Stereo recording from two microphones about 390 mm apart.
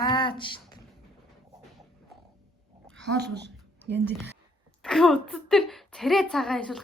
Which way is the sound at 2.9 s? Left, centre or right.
Right.